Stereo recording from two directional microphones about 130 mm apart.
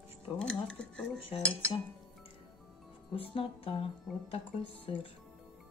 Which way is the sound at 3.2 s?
45° left (ahead or behind).